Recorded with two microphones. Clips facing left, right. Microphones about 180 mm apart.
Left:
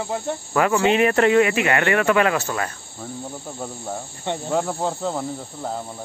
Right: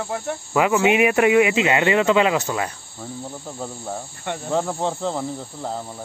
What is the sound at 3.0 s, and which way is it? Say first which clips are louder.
Cricket: even; centre (ahead or behind).